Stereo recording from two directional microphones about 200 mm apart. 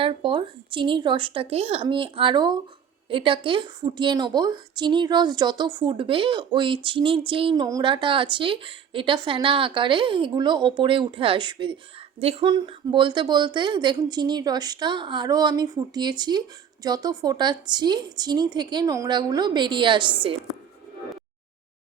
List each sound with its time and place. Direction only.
0.0 s a woman's voice: 25° right (ahead or behind)